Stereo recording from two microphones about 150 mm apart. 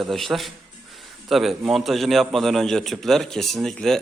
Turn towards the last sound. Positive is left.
turn(degrees=0)  # may be behind; listen again after turning